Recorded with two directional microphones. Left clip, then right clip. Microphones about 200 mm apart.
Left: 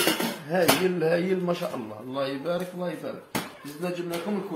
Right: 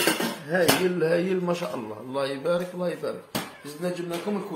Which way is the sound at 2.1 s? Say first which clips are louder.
Right 3 dB; 25° right (ahead or behind).